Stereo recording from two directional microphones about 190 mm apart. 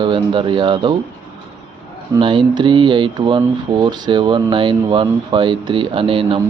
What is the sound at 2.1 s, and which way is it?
Speech, 25° right (ahead or behind).